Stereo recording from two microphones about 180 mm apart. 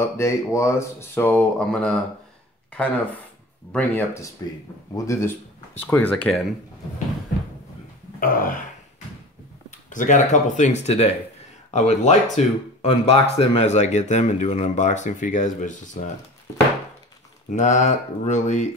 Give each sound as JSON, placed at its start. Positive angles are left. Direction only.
{"t": 0.0, "sound": "speech", "side_deg": 15}
{"t": 3.7, "sound": "speech", "side_deg": 10}
{"t": 8.2, "sound": "throat clearing", "side_deg": 50}
{"t": 9.7, "sound": "speech", "side_deg": 45}
{"t": 17.5, "sound": "speech", "side_deg": 40}